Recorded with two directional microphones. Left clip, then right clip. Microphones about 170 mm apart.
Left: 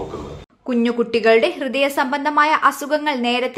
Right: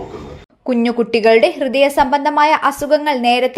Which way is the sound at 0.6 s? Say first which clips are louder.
Right 3 dB; 20° right (ahead or behind).